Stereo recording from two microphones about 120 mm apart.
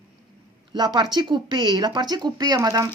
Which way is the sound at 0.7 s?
35° right (ahead or behind).